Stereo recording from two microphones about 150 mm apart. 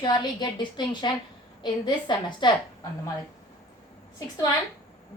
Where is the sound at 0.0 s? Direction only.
30° left (ahead or behind).